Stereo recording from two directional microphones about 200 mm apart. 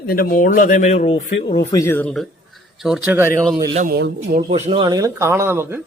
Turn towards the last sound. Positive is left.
turn(degrees=-10)  # may be behind; listen again after turning